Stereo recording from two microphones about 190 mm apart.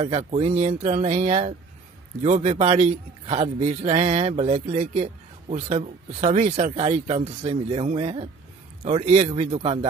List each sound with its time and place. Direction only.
0.0 s a man's voice: 30° right (ahead or behind)